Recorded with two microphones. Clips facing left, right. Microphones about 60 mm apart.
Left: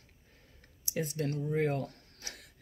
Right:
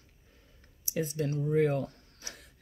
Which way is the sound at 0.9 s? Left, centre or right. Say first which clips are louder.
Right 2 dB; left.